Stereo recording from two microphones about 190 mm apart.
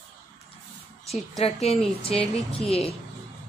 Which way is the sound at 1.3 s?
35° left (ahead or behind).